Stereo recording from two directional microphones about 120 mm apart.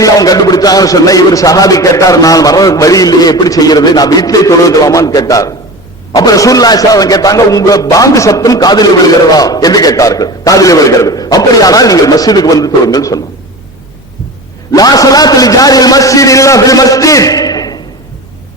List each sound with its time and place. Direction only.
0.0 s a man's voice: 30° left (ahead or behind)
14.7 s a man's voice: 30° left (ahead or behind)